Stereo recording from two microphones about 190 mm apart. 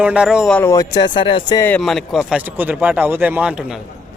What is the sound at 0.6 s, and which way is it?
Speech, 20° left (ahead or behind).